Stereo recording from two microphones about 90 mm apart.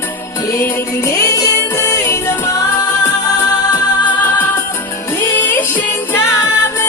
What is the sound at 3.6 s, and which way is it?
Music, 45° left (ahead or behind).